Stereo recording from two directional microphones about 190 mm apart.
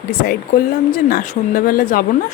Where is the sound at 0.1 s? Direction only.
50° left (ahead or behind).